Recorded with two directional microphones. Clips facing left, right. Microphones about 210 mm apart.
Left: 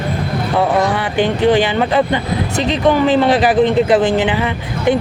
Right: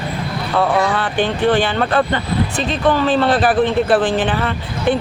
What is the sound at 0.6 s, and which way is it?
Speech, 15° left (ahead or behind).